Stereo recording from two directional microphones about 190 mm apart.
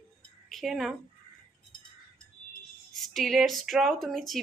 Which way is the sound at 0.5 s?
Centre (ahead or behind).